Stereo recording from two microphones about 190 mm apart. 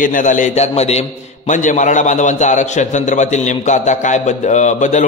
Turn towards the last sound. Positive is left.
turn(degrees=40)  # may be behind; listen again after turning